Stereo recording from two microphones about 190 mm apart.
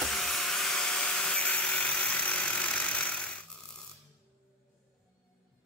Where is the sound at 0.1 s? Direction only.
Centre (ahead or behind).